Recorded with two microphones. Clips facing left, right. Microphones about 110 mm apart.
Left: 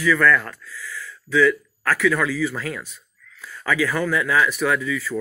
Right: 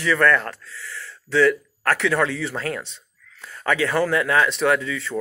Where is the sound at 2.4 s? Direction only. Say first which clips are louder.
Left 1 dB; 30° right (ahead or behind).